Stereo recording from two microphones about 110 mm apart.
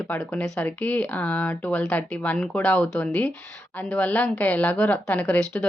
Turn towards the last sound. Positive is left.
turn(degrees=10)  # may be behind; listen again after turning